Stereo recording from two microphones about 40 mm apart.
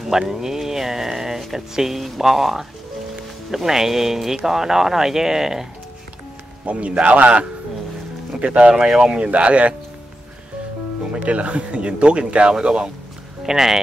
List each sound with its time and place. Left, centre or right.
0.2 s speech: centre
6.6 s a man's voice: right
9.2 s a man's voice: right
11.2 s speech: right; by 13.7 s centre